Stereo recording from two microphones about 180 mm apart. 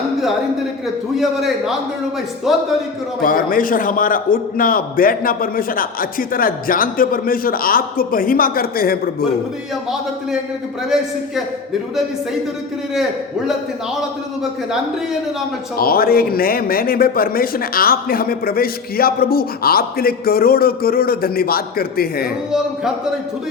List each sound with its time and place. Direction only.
1.1 s a man's voice: centre (ahead or behind)
3.2 s a man's voice: 50° left (ahead or behind)
10.8 s a man's voice: 5° right (ahead or behind)
15.8 s a man's voice: 55° left (ahead or behind)